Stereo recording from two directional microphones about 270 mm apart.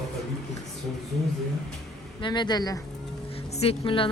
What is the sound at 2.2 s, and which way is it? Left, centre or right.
A woman's voice, centre.